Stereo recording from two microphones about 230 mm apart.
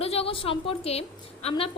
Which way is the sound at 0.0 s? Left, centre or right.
Left.